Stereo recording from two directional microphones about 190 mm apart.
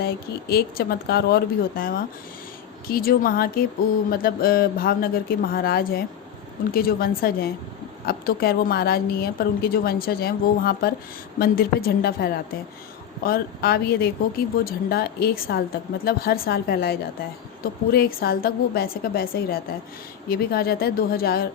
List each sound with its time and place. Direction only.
0.0 s speech: 55° left (ahead or behind)